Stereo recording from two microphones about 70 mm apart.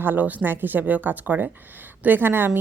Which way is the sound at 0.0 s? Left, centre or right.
Right.